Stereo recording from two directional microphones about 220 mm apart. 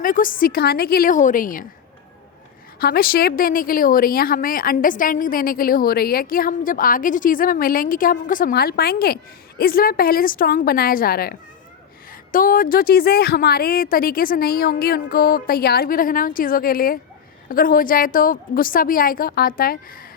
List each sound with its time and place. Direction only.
0.0 s a woman's voice: 40° left (ahead or behind)
2.7 s a woman's voice: 45° left (ahead or behind)